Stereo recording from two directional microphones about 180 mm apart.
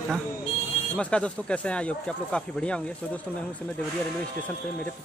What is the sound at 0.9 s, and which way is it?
Speech, 5° left (ahead or behind).